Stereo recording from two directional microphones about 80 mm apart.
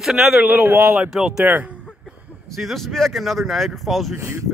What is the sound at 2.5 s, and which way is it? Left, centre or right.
Speech, centre.